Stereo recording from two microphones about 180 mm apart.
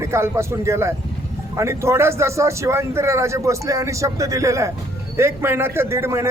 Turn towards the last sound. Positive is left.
turn(degrees=-15)  # may be behind; listen again after turning